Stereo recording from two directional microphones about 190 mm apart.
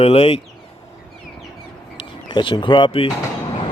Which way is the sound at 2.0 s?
25° left (ahead or behind).